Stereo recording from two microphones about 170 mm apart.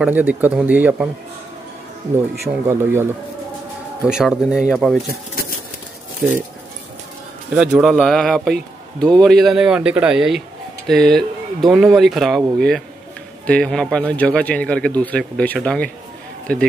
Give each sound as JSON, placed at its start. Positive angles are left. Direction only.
{"t": 0.0, "sound": "speech", "side_deg": -10}
{"t": 2.7, "sound": "speech", "side_deg": -15}
{"t": 4.1, "sound": "speech", "side_deg": -5}
{"t": 6.2, "sound": "speech", "side_deg": -5}
{"t": 7.5, "sound": "speech", "side_deg": 0}